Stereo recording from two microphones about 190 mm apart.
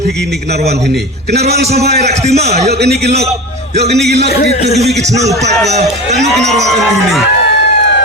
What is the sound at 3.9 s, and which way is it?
Speech, 60° right (ahead or behind).